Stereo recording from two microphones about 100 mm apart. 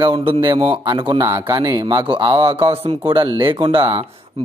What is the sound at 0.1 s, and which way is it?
A man's voice, 65° right (ahead or behind).